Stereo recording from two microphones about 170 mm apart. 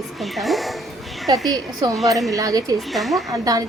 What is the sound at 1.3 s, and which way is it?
A woman's voice, 25° right (ahead or behind).